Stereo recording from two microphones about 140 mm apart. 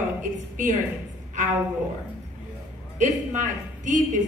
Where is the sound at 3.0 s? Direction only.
60° right (ahead or behind).